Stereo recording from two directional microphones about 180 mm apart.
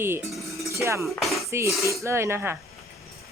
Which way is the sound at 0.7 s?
15° right (ahead or behind).